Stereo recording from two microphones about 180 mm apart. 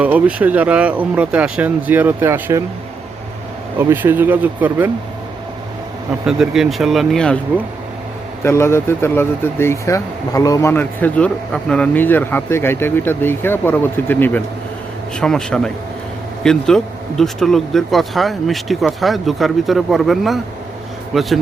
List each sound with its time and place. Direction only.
0.0 s speech: 5° right (ahead or behind)
3.8 s speech: 10° right (ahead or behind)
6.2 s speech: centre (ahead or behind)
8.4 s speech: 15° left (ahead or behind)